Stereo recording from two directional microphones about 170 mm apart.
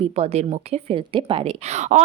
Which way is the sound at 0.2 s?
40° right (ahead or behind).